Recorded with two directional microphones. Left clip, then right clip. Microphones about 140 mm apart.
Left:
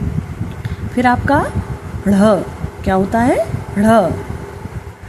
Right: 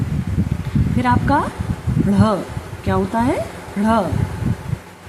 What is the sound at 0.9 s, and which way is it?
A woman's voice, 35° left (ahead or behind).